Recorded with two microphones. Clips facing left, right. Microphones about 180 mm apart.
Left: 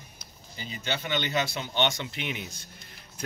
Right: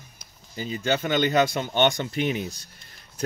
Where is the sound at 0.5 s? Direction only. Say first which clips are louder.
Right 8 dB; 45° right (ahead or behind).